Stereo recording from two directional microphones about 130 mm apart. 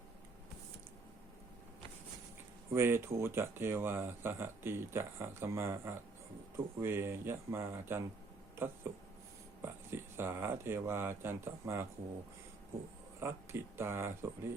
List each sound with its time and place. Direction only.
2.7 s speech: 20° right (ahead or behind)
13.1 s speech: 20° right (ahead or behind)